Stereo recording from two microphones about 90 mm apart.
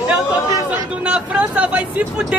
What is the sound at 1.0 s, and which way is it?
Speech, 15° right (ahead or behind).